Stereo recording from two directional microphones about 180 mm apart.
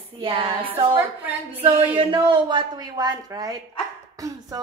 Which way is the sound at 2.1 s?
25° right (ahead or behind).